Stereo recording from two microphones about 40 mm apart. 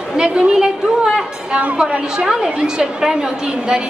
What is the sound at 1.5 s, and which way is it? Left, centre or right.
Speech, right.